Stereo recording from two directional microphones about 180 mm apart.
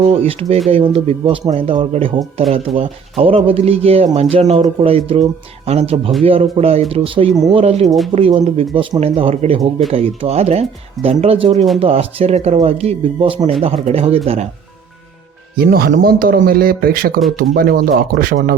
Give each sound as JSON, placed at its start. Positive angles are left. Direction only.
{"t": 0.0, "sound": "speech", "side_deg": -35}
{"t": 15.5, "sound": "speech", "side_deg": -55}